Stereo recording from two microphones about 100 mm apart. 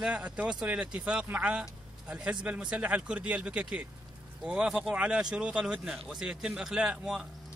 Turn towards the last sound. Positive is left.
turn(degrees=-10)  # may be behind; listen again after turning